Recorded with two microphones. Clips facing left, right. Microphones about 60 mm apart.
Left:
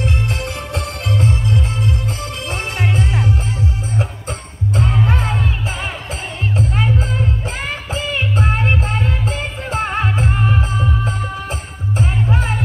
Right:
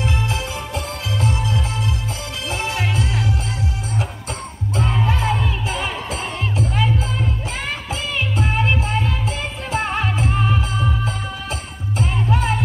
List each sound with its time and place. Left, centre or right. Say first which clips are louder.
1.2 s music: left 2 dB; left
5.0 s music: left 1 dB; left